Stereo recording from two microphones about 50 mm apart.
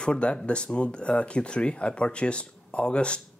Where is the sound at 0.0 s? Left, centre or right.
Left.